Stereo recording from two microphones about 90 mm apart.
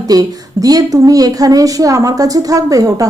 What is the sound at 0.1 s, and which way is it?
A woman's voice, 45° right (ahead or behind).